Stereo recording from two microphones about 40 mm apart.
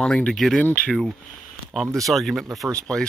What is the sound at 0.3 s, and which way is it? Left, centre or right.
Speech, centre.